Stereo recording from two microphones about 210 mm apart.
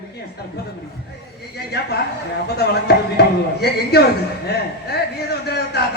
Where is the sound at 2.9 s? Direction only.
50° left (ahead or behind).